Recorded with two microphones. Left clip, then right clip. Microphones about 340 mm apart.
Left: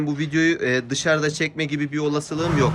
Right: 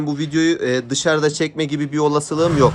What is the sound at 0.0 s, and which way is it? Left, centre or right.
Speech, centre.